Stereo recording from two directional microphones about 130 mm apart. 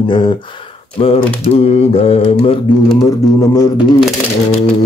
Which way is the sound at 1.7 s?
50° left (ahead or behind).